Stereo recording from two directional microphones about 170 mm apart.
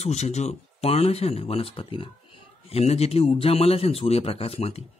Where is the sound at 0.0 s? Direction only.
40° left (ahead or behind).